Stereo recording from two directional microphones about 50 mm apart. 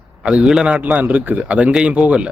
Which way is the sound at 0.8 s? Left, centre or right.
Right.